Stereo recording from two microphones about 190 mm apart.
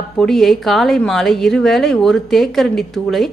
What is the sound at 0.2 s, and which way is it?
A woman's voice, centre (ahead or behind).